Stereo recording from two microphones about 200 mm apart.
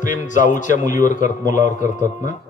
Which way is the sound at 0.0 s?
40° left (ahead or behind).